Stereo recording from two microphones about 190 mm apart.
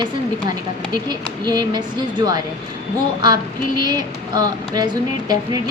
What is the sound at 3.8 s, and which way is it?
A woman's voice, 20° right (ahead or behind).